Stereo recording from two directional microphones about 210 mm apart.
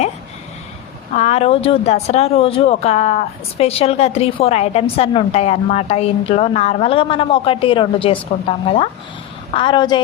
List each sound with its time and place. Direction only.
1.1 s speech: 30° left (ahead or behind)